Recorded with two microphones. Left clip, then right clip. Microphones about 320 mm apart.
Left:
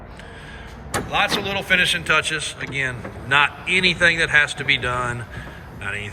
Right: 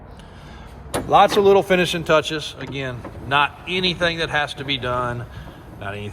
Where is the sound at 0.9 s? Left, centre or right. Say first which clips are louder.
Right 6 dB; centre.